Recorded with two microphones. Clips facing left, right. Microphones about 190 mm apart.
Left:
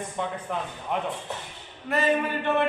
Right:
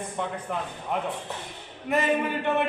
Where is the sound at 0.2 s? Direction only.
5° right (ahead or behind).